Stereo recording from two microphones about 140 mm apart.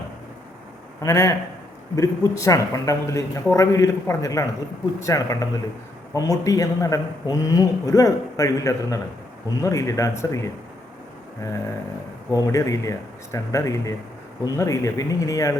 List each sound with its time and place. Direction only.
1.0 s a man's voice: 25° left (ahead or behind)
12.3 s a man's voice: 25° left (ahead or behind)